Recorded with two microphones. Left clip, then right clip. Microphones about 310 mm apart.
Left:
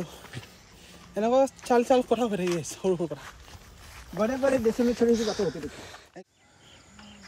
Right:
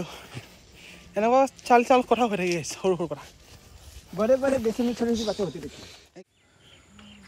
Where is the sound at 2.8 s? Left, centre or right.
Centre.